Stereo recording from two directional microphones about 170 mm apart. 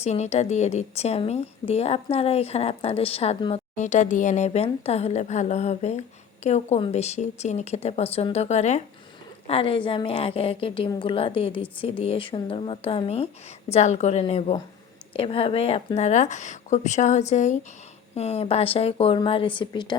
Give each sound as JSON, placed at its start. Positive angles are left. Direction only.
{"t": 0.0, "sound": "a woman's voice", "side_deg": 40}